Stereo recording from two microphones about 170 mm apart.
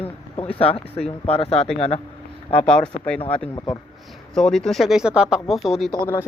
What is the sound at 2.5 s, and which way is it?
Speech, 5° left (ahead or behind).